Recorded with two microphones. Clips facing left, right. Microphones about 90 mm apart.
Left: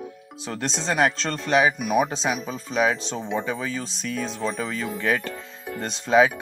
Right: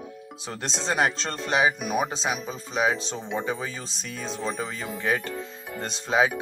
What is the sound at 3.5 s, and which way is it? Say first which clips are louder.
Speech: left 2 dB; 30° right (ahead or behind).